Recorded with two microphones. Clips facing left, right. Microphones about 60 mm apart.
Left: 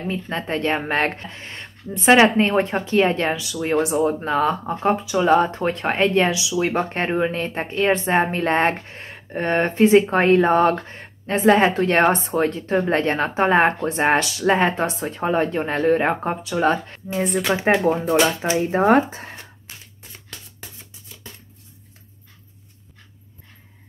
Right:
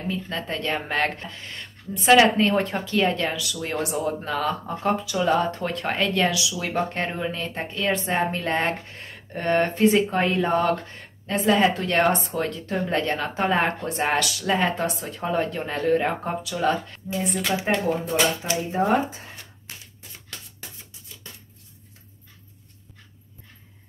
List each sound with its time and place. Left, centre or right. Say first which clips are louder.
0.1 s speech: left 4 dB; left
17.1 s speech: left 4 dB; left
18.7 s speech: left 5 dB; left